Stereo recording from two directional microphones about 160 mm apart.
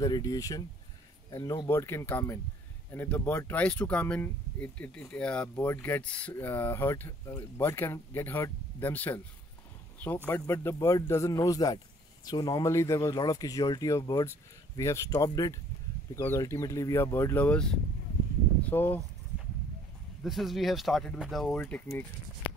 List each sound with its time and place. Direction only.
0.0 s speech: 20° left (ahead or behind)
20.2 s speech: centre (ahead or behind)